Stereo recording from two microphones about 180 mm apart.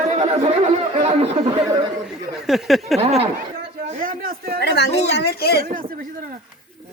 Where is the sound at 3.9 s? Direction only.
50° right (ahead or behind).